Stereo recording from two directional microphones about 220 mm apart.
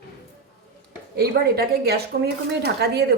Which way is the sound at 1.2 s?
45° right (ahead or behind).